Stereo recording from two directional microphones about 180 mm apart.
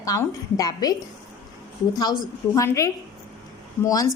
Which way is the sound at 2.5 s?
15° left (ahead or behind).